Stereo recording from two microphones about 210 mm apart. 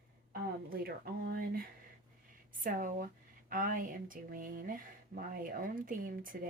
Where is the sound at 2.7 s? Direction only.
40° right (ahead or behind).